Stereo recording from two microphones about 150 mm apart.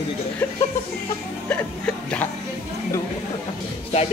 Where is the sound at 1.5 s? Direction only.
5° left (ahead or behind).